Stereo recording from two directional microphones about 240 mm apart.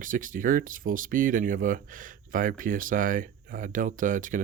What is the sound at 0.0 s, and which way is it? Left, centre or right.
Speech, right.